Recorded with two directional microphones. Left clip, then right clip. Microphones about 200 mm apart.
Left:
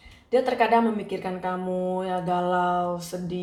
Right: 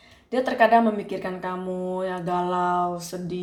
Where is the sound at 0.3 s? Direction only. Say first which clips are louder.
Right 2 dB; 40° right (ahead or behind).